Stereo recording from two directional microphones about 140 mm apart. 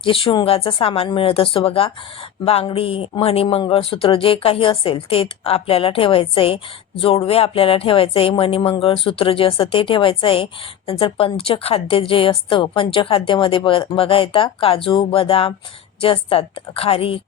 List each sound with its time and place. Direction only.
0.0 s a woman's voice: 40° left (ahead or behind)